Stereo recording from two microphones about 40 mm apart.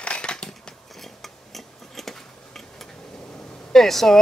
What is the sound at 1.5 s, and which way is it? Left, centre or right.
Tick-tock, centre.